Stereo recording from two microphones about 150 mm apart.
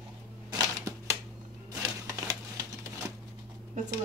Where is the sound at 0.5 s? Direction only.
20° right (ahead or behind).